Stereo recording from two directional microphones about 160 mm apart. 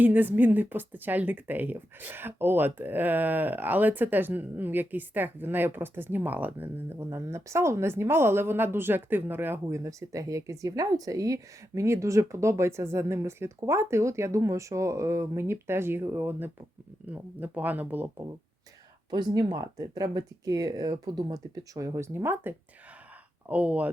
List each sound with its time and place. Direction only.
0.0 s speech: 10° right (ahead or behind)
19.1 s speech: 25° right (ahead or behind); by 23.9 s 10° right (ahead or behind)